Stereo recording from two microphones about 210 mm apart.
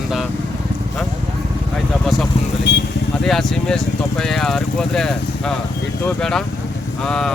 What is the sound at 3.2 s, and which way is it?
Speech, centre (ahead or behind).